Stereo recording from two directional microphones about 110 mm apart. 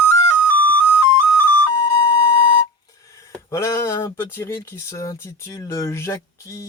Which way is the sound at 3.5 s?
30° left (ahead or behind).